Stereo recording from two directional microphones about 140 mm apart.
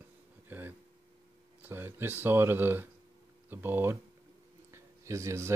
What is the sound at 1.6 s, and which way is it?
Speech, 15° right (ahead or behind).